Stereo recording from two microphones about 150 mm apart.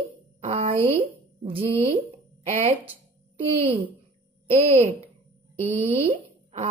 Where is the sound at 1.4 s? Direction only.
40° right (ahead or behind).